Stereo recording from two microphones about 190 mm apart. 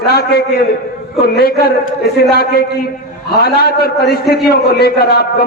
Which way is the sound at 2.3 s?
55° left (ahead or behind).